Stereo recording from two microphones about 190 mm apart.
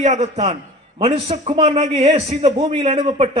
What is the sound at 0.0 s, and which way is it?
A man's voice, 35° right (ahead or behind).